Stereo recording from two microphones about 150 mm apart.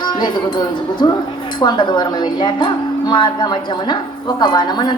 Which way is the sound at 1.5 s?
30° left (ahead or behind).